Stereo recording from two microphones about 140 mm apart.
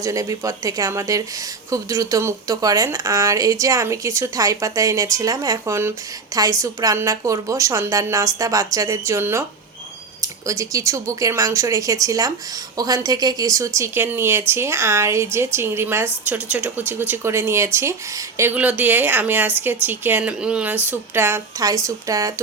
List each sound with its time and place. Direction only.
0.0 s a woman's voice: 25° right (ahead or behind)